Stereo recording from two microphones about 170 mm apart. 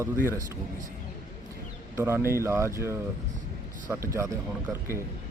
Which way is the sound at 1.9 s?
15° right (ahead or behind).